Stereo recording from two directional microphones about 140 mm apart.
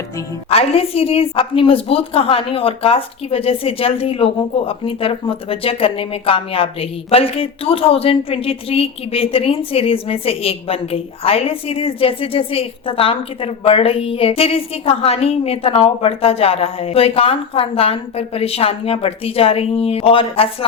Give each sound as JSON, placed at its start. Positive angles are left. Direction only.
{"t": 0.5, "sound": "a woman's voice", "side_deg": 45}